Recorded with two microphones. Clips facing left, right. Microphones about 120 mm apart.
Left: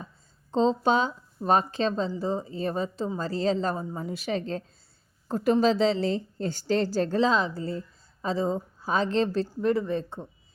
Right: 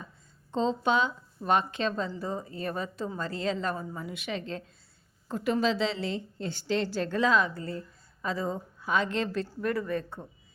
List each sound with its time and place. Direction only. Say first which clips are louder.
0.5 s a woman's voice: left 4 dB; 35° left (ahead or behind)